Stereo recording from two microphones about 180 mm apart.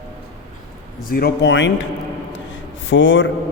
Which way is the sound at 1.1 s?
70° left (ahead or behind).